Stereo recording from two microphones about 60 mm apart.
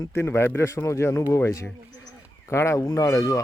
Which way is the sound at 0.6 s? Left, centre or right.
Left.